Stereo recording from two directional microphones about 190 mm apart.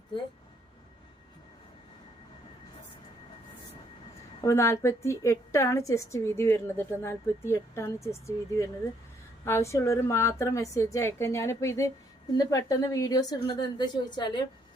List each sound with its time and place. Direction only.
4.4 s a woman's voice: 15° left (ahead or behind)